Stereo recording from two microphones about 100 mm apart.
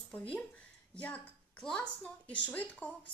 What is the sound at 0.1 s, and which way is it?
A woman's voice, 10° left (ahead or behind).